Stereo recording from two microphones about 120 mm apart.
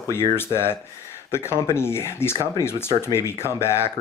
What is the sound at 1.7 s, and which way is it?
Speech, 20° left (ahead or behind).